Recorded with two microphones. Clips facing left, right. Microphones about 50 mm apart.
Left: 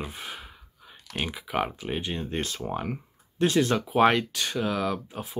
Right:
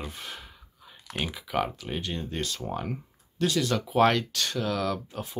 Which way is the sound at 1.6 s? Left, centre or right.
Left.